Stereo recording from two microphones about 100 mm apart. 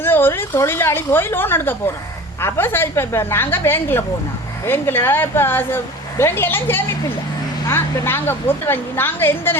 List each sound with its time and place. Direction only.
0.0 s a woman's voice: 20° left (ahead or behind)